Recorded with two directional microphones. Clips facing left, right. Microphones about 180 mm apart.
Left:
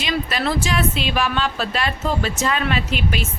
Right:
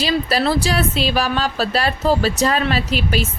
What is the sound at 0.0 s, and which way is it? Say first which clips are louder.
A woman's voice: right 4 dB; 35° right (ahead or behind).